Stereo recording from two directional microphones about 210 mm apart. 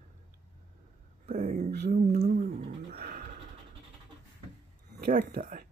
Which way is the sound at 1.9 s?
35° right (ahead or behind).